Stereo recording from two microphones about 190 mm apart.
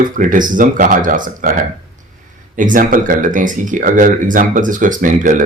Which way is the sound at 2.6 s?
45° right (ahead or behind).